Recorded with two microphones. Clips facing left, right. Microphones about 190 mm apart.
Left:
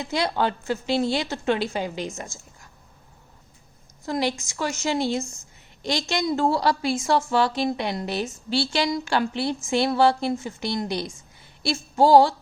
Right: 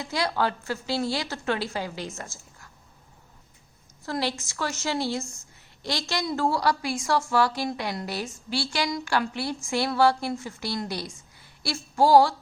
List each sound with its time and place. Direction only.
0.0 s a woman's voice: 20° left (ahead or behind)
4.0 s a woman's voice: 15° left (ahead or behind)